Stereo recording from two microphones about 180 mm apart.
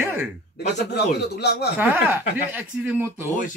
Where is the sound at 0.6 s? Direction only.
65° left (ahead or behind).